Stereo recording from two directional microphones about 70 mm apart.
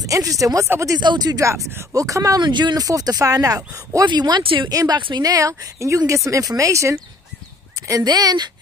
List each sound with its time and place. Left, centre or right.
0.0 s speech: right
0.9 s speech: right
1.4 s speech: right
2.0 s speech: right
2.4 s speech: right
4.7 s speech: right
8.0 s speech: right